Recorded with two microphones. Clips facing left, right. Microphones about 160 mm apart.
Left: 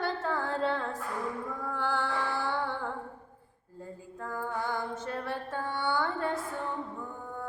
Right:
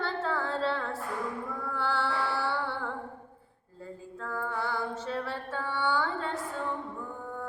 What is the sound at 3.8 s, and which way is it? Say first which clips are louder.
Music: right 1 dB; 15° left (ahead or behind).